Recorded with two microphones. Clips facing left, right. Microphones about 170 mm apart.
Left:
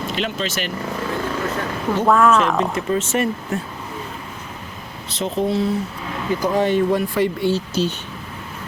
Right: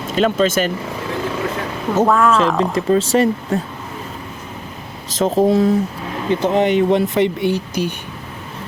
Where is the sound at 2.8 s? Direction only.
35° right (ahead or behind).